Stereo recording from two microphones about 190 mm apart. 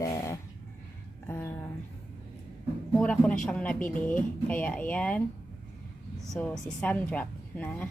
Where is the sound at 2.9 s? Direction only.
5° left (ahead or behind).